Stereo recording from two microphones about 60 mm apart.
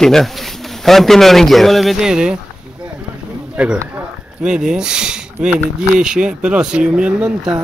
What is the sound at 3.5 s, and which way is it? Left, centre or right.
Speech, centre.